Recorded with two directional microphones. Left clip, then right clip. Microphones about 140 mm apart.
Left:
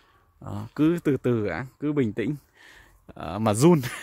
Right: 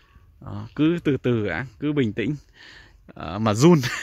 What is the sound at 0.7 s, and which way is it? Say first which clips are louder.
Speech: right 1 dB; 20° left (ahead or behind).